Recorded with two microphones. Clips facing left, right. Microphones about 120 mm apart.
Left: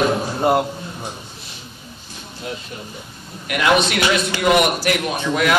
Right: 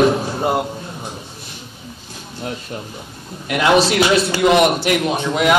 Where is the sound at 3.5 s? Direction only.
30° right (ahead or behind).